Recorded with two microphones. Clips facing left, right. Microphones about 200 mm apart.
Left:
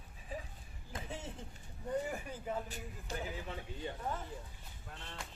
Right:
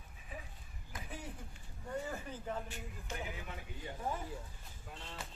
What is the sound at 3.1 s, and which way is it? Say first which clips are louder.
Speech: left 2 dB; 35° left (ahead or behind).